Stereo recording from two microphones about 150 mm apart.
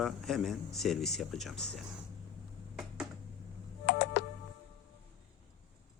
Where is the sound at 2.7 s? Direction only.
5° right (ahead or behind).